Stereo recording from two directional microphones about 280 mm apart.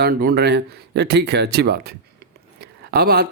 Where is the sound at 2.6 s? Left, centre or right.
Right.